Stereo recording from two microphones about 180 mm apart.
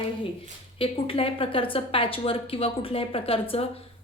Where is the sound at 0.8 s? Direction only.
30° left (ahead or behind).